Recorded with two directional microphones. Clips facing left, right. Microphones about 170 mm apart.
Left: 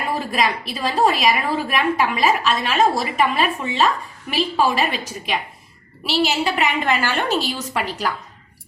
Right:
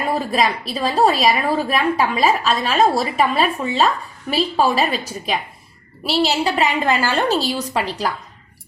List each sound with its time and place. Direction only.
0.3 s a woman's voice: 35° right (ahead or behind)